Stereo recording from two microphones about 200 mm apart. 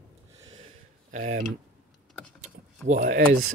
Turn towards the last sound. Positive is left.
turn(degrees=-45)  # may be behind; listen again after turning